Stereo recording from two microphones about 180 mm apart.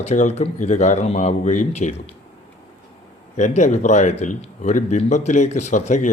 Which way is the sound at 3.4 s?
40° left (ahead or behind).